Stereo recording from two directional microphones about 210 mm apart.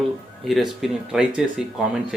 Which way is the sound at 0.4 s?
Centre (ahead or behind).